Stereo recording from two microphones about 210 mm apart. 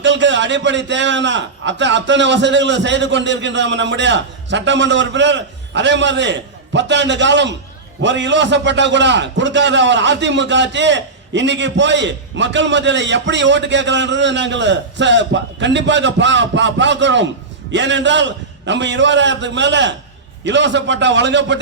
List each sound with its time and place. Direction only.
0.0 s a man's voice: 60° right (ahead or behind)